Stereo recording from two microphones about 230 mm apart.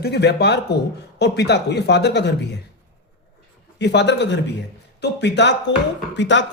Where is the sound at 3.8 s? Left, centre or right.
Left.